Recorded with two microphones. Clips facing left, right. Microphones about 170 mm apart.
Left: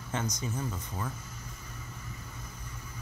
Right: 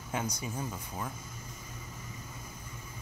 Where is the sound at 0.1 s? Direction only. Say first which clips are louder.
Left 1 dB; 10° right (ahead or behind).